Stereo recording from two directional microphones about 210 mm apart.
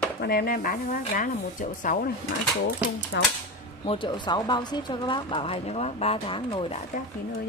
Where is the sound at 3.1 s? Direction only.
55° left (ahead or behind).